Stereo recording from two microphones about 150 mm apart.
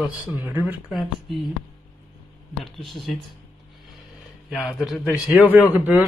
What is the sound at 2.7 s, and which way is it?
Speech, centre (ahead or behind).